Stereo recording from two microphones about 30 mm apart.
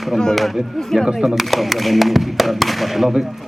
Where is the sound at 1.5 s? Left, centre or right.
Centre.